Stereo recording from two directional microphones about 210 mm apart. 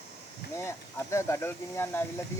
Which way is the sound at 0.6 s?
15° left (ahead or behind).